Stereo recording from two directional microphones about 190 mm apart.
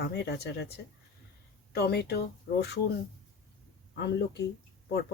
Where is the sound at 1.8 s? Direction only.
55° left (ahead or behind).